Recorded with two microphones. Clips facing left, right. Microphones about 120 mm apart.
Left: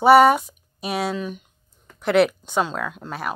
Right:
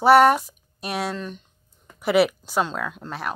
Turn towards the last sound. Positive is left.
turn(degrees=0)  # may be behind; listen again after turning